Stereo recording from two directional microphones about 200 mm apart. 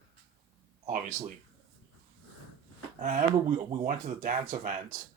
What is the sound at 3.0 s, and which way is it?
Speech, 40° right (ahead or behind).